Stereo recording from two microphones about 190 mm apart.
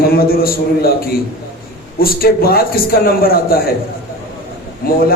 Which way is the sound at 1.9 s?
50° left (ahead or behind).